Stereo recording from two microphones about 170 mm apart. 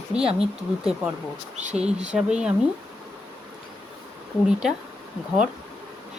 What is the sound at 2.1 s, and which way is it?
Speech, 5° right (ahead or behind).